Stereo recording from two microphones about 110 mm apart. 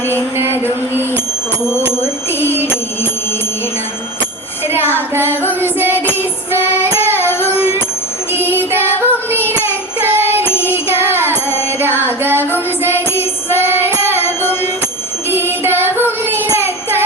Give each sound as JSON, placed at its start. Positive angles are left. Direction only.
{"t": 0.3, "sound": "music", "side_deg": -20}
{"t": 2.0, "sound": "music", "side_deg": 20}
{"t": 5.5, "sound": "child singing", "side_deg": -20}
{"t": 7.2, "sound": "music", "side_deg": 20}
{"t": 8.3, "sound": "music", "side_deg": -20}
{"t": 9.0, "sound": "child singing", "side_deg": -20}
{"t": 10.0, "sound": "music", "side_deg": -20}
{"t": 10.4, "sound": "music", "side_deg": 20}
{"t": 11.0, "sound": "music", "side_deg": -20}
{"t": 13.5, "sound": "child singing", "side_deg": -20}
{"t": 14.2, "sound": "music", "side_deg": 20}
{"t": 15.3, "sound": "child singing", "side_deg": -20}